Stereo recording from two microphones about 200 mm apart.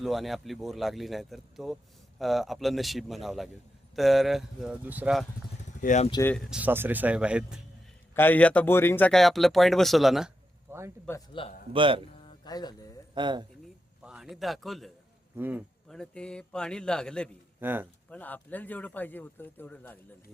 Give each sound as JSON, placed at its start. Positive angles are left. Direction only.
{"t": 0.0, "sound": "speech", "side_deg": 0}
{"t": 5.8, "sound": "speech", "side_deg": 40}
{"t": 6.1, "sound": "speech", "side_deg": 20}
{"t": 6.3, "sound": "speech", "side_deg": 0}
{"t": 8.1, "sound": "speech", "side_deg": 10}
{"t": 11.3, "sound": "a man's voice", "side_deg": 25}
{"t": 11.7, "sound": "speech", "side_deg": -25}
{"t": 12.2, "sound": "music", "side_deg": 20}
{"t": 13.1, "sound": "speech", "side_deg": -25}
{"t": 14.0, "sound": "a man's voice", "side_deg": -5}
{"t": 15.9, "sound": "speech", "side_deg": 5}
{"t": 17.6, "sound": "speech", "side_deg": -10}
{"t": 18.1, "sound": "speech", "side_deg": 10}